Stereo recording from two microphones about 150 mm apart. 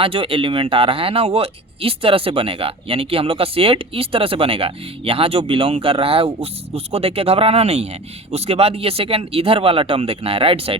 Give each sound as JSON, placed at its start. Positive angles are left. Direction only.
{"t": 0.0, "sound": "speech", "side_deg": -35}